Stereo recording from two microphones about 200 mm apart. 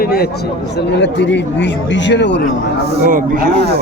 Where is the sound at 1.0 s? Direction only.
65° left (ahead or behind).